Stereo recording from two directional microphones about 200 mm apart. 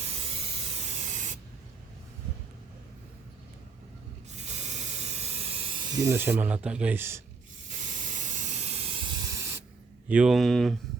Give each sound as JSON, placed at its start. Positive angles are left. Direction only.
{"t": 0.1, "sound": "spray", "side_deg": -30}
{"t": 4.4, "sound": "spray", "side_deg": -35}
{"t": 7.7, "sound": "hiss", "side_deg": -40}
{"t": 10.1, "sound": "speech", "side_deg": -5}